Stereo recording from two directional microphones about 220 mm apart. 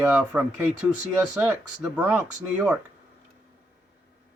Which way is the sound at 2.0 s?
5° right (ahead or behind).